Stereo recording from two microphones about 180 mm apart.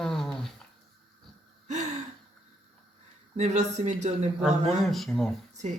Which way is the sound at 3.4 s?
40° right (ahead or behind).